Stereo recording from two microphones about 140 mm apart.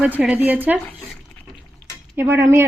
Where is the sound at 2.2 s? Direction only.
15° right (ahead or behind).